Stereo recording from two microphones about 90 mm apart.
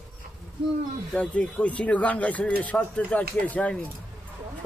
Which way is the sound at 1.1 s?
15° left (ahead or behind).